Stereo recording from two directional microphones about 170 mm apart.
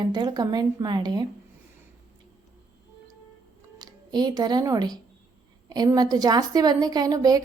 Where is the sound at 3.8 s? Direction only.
25° right (ahead or behind).